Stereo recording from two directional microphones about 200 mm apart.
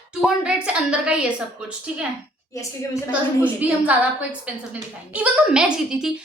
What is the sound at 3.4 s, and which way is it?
A woman's voice, 5° right (ahead or behind).